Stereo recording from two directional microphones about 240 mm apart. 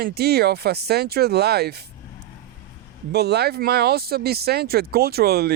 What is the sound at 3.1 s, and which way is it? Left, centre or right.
Speech, right.